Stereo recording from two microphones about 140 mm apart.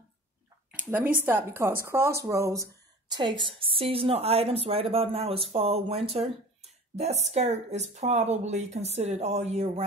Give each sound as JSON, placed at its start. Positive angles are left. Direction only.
{"t": 0.7, "sound": "a woman's voice", "side_deg": -10}
{"t": 3.2, "sound": "a woman's voice", "side_deg": -35}